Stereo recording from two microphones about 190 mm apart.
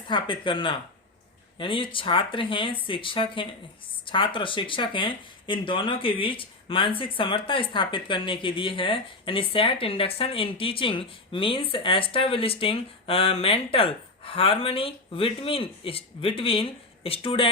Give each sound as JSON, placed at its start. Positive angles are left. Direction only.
{"t": 0.1, "sound": "speech", "side_deg": 25}